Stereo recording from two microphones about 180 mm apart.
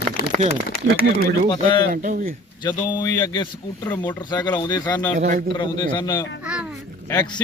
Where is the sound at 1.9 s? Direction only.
50° right (ahead or behind).